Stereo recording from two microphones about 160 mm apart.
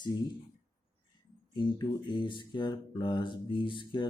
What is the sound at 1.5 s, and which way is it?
Speech, 30° left (ahead or behind).